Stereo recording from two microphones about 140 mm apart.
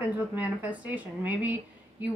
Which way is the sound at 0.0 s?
10° right (ahead or behind).